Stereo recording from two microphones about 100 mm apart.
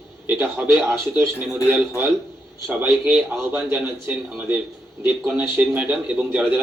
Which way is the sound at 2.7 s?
15° right (ahead or behind).